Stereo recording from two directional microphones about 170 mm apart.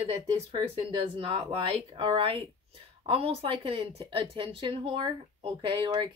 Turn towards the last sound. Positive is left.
turn(degrees=-30)  # may be behind; listen again after turning